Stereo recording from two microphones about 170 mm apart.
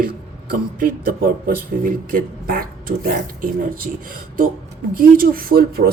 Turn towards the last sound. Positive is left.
turn(degrees=-60)  # may be behind; listen again after turning